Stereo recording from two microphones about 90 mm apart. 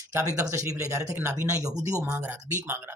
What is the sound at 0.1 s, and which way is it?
Speech, 35° right (ahead or behind).